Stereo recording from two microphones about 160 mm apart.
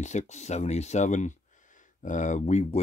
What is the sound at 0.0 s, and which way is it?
Speech, 45° left (ahead or behind).